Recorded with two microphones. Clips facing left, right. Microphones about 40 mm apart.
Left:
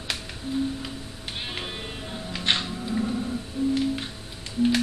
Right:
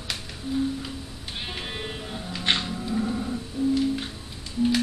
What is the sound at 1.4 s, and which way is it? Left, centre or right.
Music, centre.